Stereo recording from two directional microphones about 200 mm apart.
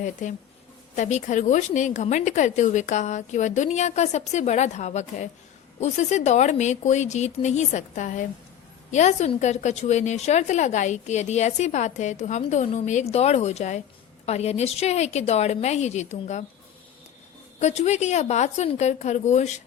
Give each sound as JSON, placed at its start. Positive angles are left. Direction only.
{"t": 0.0, "sound": "a woman's voice", "side_deg": 40}
{"t": 17.6, "sound": "a woman's voice", "side_deg": 35}